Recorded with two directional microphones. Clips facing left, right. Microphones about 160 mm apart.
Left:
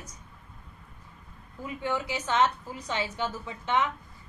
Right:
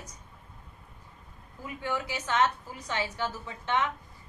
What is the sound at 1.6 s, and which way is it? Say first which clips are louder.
A woman's voice: left 2 dB; 20° left (ahead or behind).